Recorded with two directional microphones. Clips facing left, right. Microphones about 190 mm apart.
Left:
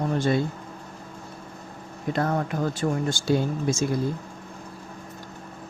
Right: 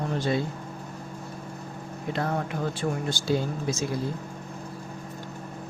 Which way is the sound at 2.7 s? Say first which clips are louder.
Left 3 dB; 40° left (ahead or behind).